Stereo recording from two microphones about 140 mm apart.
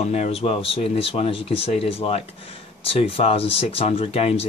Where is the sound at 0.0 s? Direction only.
50° left (ahead or behind).